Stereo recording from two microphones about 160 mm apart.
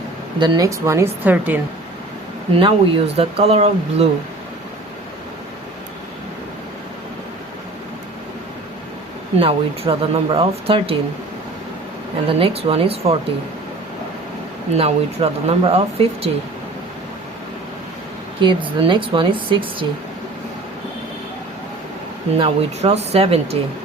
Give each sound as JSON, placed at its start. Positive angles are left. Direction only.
{"t": 0.3, "sound": "a woman's voice", "side_deg": -25}
{"t": 2.6, "sound": "speech", "side_deg": -35}
{"t": 9.4, "sound": "speech", "side_deg": -35}
{"t": 12.4, "sound": "speech", "side_deg": -40}
{"t": 14.7, "sound": "speech", "side_deg": -40}
{"t": 18.3, "sound": "speech", "side_deg": -30}
{"t": 22.4, "sound": "speech", "side_deg": -40}